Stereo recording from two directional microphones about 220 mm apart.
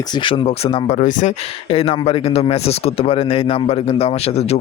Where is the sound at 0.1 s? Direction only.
20° left (ahead or behind).